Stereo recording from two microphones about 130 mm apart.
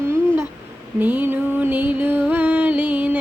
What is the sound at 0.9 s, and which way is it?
Music, 15° right (ahead or behind).